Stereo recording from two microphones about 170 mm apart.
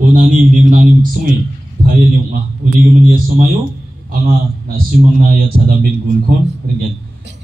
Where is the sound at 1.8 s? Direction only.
55° right (ahead or behind).